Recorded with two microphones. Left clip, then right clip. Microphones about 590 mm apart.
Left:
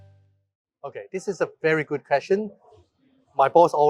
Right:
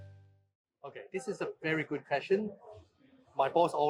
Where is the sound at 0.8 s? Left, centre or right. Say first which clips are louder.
Left 8 dB; left.